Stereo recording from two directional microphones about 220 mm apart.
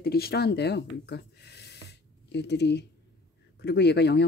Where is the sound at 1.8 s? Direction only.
50° left (ahead or behind).